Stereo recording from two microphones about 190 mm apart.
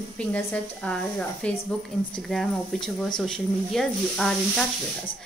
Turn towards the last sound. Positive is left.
turn(degrees=0)  # may be behind; listen again after turning